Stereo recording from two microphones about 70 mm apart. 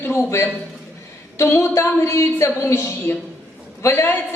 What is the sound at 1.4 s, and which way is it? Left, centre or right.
A woman's voice, left.